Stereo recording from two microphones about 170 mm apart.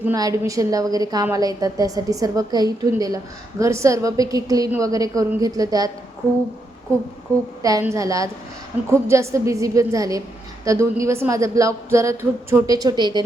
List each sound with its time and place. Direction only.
0.0 s a woman's voice: 20° right (ahead or behind)
7.6 s a woman's voice: 15° right (ahead or behind)